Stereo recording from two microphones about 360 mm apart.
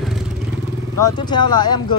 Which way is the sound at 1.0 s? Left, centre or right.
Centre.